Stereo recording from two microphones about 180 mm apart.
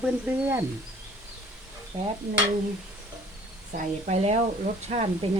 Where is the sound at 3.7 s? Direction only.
40° right (ahead or behind).